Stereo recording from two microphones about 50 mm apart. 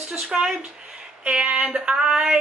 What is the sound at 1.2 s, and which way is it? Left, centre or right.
Speech, right.